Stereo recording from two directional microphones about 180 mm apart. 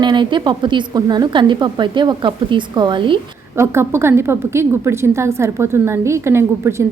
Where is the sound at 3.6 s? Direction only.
15° right (ahead or behind).